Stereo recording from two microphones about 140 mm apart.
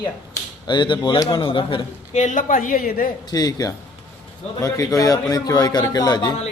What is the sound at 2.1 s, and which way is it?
A woman's voice, 60° left (ahead or behind).